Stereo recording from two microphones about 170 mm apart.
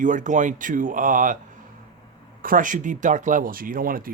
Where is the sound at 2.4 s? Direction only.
50° right (ahead or behind).